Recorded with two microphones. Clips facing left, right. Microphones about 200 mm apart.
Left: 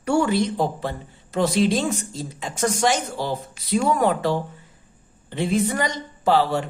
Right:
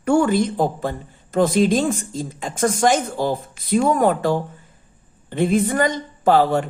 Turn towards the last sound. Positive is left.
turn(degrees=-50)  # may be behind; listen again after turning